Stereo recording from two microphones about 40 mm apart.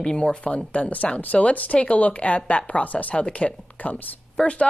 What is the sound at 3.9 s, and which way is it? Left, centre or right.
Speech, left.